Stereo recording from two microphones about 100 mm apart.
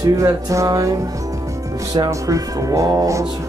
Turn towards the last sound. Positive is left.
turn(degrees=-35)  # may be behind; listen again after turning